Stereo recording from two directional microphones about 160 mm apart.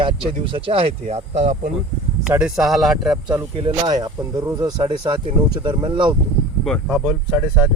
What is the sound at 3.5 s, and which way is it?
Speech, 30° right (ahead or behind).